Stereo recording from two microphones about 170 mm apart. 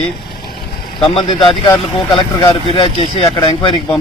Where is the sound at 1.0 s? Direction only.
30° left (ahead or behind).